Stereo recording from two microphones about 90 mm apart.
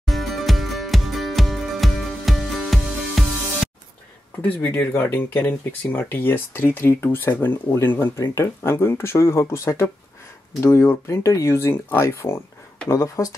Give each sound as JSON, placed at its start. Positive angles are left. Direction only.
{"t": 0.0, "sound": "music", "side_deg": 0}
{"t": 4.4, "sound": "speech", "side_deg": 20}